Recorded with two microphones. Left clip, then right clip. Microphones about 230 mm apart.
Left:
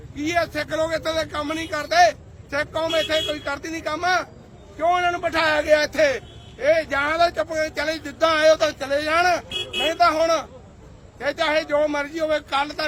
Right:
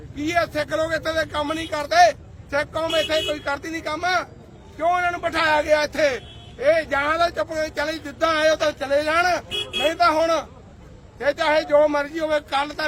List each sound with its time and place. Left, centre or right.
0.2 s a man's voice: centre